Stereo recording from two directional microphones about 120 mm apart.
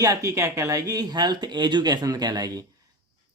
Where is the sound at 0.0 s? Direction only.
25° right (ahead or behind).